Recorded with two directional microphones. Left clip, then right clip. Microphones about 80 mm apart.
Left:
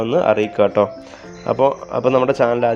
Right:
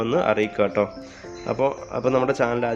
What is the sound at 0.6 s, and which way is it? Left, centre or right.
Speech, left.